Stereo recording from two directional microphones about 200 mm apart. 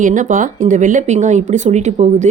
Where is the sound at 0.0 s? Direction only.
40° right (ahead or behind).